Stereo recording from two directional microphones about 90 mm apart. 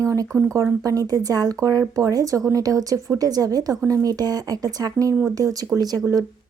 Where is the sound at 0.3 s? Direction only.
30° right (ahead or behind).